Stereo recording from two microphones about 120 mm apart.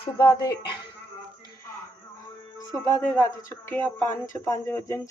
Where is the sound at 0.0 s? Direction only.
40° left (ahead or behind).